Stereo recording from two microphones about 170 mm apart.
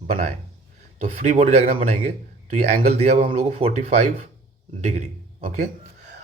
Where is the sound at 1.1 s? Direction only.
40° right (ahead or behind).